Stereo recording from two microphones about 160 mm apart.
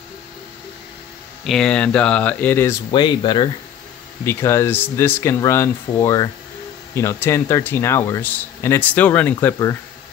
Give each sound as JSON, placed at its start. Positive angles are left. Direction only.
{"t": 1.4, "sound": "speech", "side_deg": 5}
{"t": 2.9, "sound": "speech", "side_deg": 30}
{"t": 4.2, "sound": "speech", "side_deg": 15}